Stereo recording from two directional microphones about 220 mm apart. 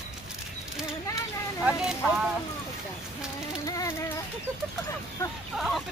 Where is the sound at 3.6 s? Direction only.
15° left (ahead or behind).